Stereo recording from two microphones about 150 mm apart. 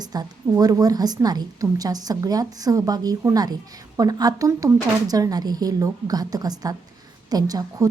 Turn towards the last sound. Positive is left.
turn(degrees=-25)  # may be behind; listen again after turning